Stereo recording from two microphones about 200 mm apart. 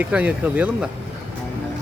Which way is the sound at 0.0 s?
5° right (ahead or behind).